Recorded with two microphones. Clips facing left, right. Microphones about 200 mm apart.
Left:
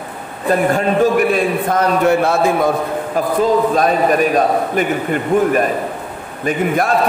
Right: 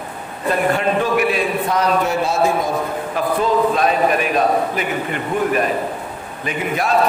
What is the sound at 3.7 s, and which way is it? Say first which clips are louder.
A man's voice: left 3 dB; 40° left (ahead or behind).